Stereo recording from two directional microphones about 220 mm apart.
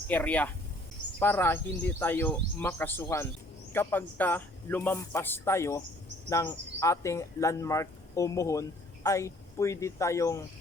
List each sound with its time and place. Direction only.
0.1 s speech: 5° left (ahead or behind)